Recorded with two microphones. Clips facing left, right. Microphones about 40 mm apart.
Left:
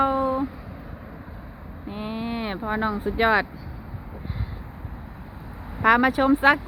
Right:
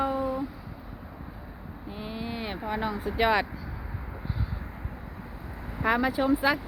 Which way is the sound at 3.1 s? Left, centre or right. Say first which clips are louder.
Left 3 dB; centre.